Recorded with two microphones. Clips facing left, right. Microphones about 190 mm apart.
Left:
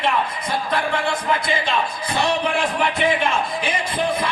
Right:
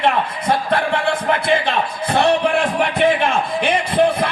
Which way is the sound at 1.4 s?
60° right (ahead or behind).